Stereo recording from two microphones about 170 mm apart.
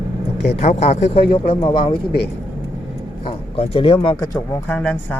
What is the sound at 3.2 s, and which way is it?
A man's voice, 30° left (ahead or behind).